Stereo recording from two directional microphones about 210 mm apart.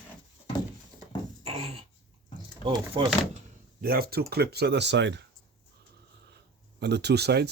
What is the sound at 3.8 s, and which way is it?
Speech, 45° right (ahead or behind).